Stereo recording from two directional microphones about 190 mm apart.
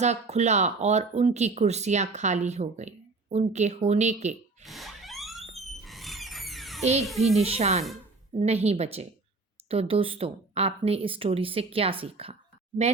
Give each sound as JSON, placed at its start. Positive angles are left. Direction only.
{"t": 0.0, "sound": "speech", "side_deg": -35}
{"t": 4.6, "sound": "a sound", "side_deg": 0}
{"t": 5.8, "sound": "frog", "side_deg": 0}
{"t": 7.2, "sound": "speech", "side_deg": -35}